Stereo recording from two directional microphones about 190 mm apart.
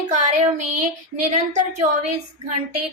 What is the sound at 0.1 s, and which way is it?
Speech, 40° right (ahead or behind).